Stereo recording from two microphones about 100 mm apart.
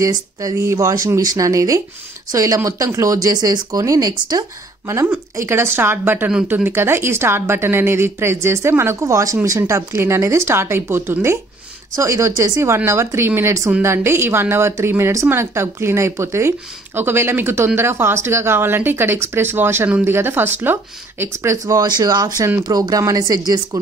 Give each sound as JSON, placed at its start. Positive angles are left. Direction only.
{"t": 0.0, "sound": "speech", "side_deg": -35}
{"t": 4.8, "sound": "speech", "side_deg": -25}
{"t": 21.8, "sound": "speech", "side_deg": -45}